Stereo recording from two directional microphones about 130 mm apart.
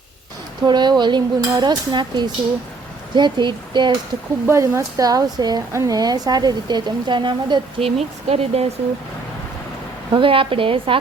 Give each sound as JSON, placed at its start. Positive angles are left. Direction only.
{"t": 0.6, "sound": "speech", "side_deg": -35}
{"t": 4.4, "sound": "speech", "side_deg": -20}
{"t": 10.1, "sound": "a woman's voice", "side_deg": -40}